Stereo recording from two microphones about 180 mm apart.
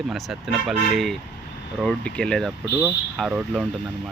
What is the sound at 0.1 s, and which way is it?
Speech, centre (ahead or behind).